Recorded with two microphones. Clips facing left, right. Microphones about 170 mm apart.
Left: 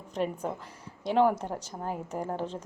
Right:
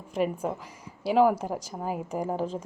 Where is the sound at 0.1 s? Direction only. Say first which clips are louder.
Right 3 dB; 5° right (ahead or behind).